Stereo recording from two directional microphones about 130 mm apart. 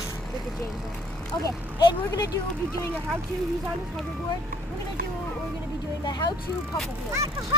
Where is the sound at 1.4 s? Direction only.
30° left (ahead or behind).